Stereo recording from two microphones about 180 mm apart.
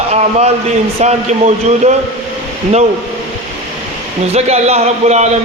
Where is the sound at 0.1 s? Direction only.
35° right (ahead or behind).